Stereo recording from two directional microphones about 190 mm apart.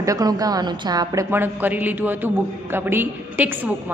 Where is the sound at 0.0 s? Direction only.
20° right (ahead or behind).